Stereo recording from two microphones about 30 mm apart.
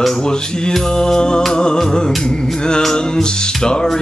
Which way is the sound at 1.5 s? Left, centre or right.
Left.